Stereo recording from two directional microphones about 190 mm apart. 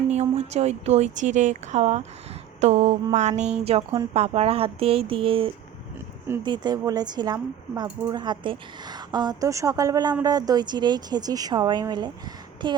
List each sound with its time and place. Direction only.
0.1 s a woman's voice: 35° right (ahead or behind)